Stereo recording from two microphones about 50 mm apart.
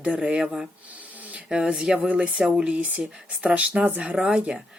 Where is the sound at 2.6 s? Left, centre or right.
Right.